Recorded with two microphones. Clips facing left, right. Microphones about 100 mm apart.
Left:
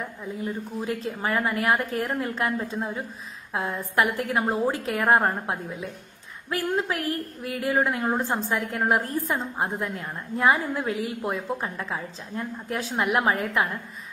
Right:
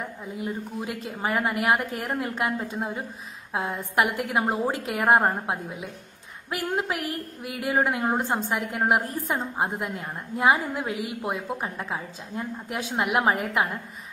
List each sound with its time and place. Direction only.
1.2 s a woman's voice: 20° right (ahead or behind)